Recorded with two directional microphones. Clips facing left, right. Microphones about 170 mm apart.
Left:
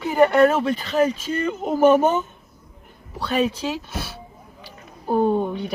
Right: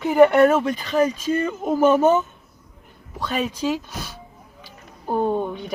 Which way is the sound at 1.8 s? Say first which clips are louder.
Left 2 dB; 15° left (ahead or behind).